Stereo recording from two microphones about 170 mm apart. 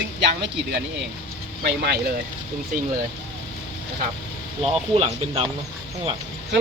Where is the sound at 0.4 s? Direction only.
90° right.